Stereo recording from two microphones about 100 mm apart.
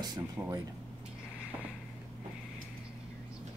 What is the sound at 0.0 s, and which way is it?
Speech, 40° right (ahead or behind).